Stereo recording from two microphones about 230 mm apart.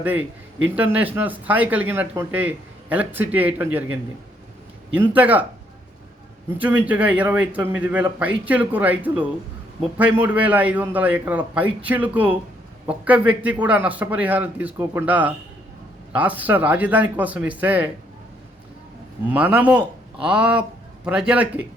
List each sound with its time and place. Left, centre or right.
0.0 s speech: centre
4.9 s speech: centre
6.6 s speech: centre
19.3 s speech: centre